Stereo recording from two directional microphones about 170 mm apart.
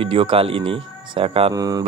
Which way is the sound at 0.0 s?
30° right (ahead or behind).